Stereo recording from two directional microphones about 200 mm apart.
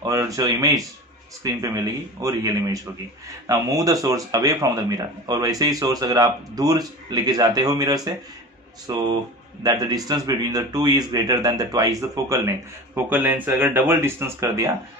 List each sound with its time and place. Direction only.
0.0 s speech: 15° right (ahead or behind)